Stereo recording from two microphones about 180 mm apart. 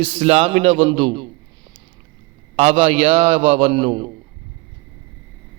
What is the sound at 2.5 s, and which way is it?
A man's voice, 35° right (ahead or behind).